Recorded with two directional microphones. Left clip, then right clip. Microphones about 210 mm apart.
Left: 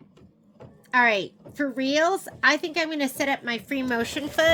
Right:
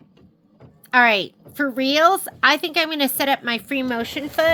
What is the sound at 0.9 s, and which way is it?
A woman's voice, 35° right (ahead or behind).